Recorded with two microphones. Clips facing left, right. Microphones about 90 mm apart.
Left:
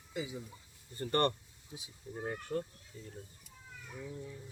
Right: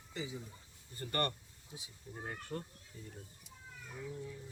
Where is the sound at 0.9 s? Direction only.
30° left (ahead or behind).